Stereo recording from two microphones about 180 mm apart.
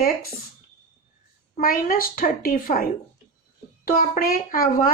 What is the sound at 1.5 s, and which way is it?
A woman's voice, 50° left (ahead or behind).